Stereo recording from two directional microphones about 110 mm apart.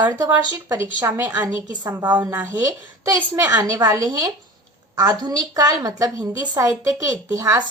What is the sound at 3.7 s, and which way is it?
A woman's voice, 30° right (ahead or behind).